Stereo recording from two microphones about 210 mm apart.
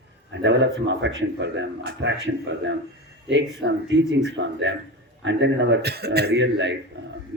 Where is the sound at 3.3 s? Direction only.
60° right (ahead or behind).